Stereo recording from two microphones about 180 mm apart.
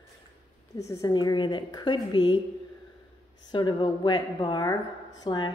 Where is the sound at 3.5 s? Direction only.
25° left (ahead or behind).